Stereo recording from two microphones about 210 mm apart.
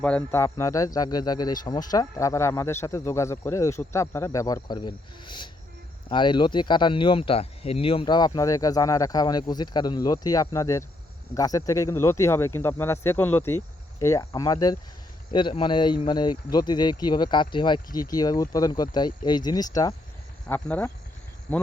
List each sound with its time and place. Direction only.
0.0 s speech: 5° left (ahead or behind)